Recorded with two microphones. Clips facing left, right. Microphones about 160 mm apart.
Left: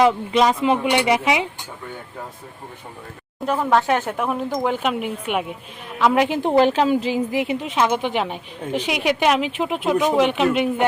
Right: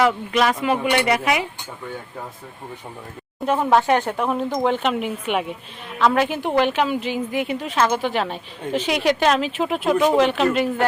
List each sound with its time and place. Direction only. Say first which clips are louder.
0.0 s speech: left 2 dB; 25° left (ahead or behind)
3.6 s speech: right 1 dB; 5° right (ahead or behind)
6.0 s a woman's voice: left 1 dB; 15° left (ahead or behind); by 7.1 s 35° left (ahead or behind)
7.3 s a woman's voice: left 1 dB; 25° left (ahead or behind)